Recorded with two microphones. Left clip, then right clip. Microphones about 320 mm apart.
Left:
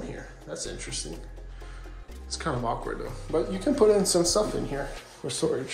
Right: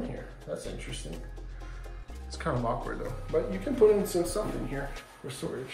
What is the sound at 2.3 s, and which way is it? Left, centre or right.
Speech, centre.